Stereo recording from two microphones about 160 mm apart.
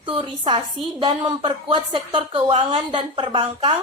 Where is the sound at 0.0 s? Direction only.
30° right (ahead or behind).